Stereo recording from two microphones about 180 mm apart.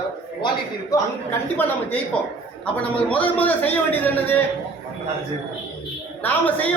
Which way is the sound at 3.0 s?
10° left (ahead or behind).